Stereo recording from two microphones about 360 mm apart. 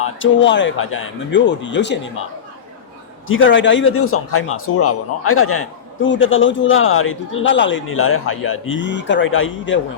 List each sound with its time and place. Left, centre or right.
0.0 s a man's voice: left
3.2 s a man's voice: left